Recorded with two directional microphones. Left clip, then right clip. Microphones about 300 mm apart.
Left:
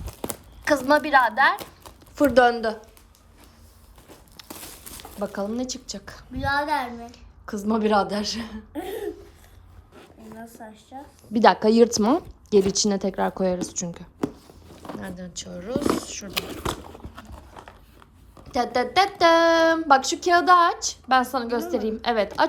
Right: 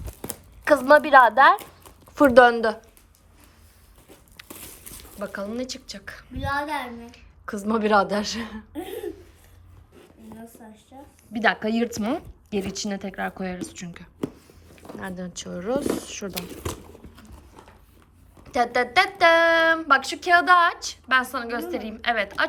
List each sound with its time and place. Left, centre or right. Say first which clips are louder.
0.2 s speech: left 6 dB; centre
4.4 s a sound: left 2 dB; centre
6.5 s a woman's voice: left 3 dB; centre
10.6 s a woman's voice: left 5 dB; centre
11.3 s a woman's voice: left 6 dB; centre
18.4 s speech: right 1 dB; centre